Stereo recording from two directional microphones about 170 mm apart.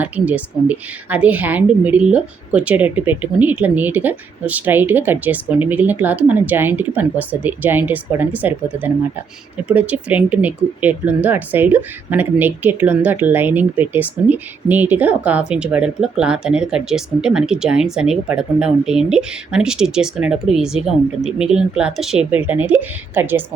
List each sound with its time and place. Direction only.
0.0 s speech: 10° right (ahead or behind)